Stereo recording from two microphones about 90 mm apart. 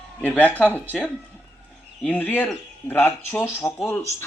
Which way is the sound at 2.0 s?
20° left (ahead or behind).